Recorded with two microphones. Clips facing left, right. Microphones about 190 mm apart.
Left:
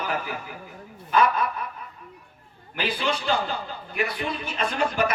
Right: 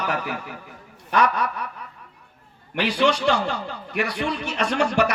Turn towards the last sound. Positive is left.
turn(degrees=-75)  # may be behind; listen again after turning